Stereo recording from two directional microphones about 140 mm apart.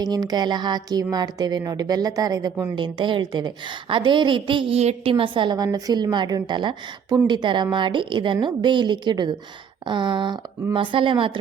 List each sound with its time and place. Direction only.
0.0 s a woman's voice: 30° right (ahead or behind)